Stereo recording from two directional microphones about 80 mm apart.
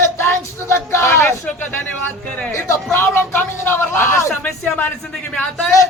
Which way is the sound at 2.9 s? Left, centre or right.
Left.